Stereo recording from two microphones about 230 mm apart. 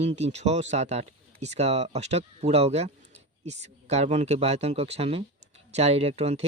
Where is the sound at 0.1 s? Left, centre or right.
Right.